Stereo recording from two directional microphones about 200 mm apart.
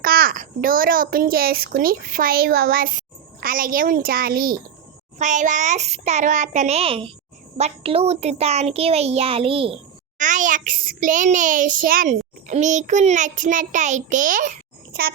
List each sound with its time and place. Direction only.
0.0 s a child's voice: 50° right (ahead or behind); by 9.8 s 25° right (ahead or behind)
10.2 s a child's voice: 40° right (ahead or behind)